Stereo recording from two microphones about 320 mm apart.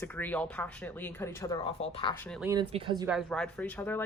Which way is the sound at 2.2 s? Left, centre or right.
Centre.